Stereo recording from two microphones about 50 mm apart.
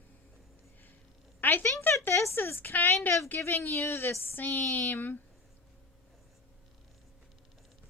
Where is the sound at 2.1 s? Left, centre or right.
Left.